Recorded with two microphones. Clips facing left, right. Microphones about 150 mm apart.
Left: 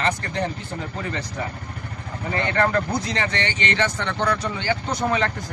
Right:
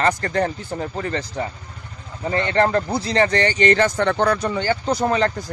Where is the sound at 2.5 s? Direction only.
30° right (ahead or behind).